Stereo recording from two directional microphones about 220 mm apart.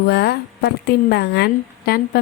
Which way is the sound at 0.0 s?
45° left (ahead or behind).